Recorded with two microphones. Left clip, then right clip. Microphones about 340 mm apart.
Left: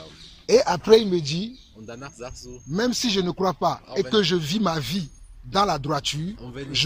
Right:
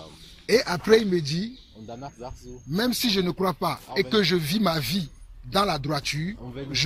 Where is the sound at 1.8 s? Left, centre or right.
Left.